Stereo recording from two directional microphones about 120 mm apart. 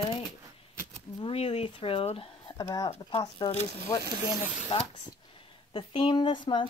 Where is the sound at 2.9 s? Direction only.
45° left (ahead or behind).